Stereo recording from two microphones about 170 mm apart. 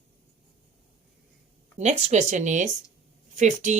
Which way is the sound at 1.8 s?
40° right (ahead or behind).